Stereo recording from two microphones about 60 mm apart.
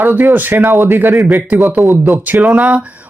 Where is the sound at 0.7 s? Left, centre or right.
Right.